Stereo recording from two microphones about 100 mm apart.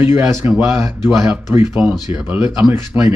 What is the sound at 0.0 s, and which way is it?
Speech, 25° right (ahead or behind).